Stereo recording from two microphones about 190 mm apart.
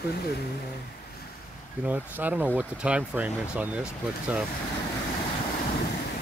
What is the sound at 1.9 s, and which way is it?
Speech, 10° right (ahead or behind).